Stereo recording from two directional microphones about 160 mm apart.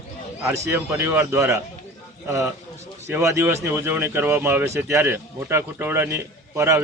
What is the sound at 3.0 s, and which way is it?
Speech, 15° right (ahead or behind).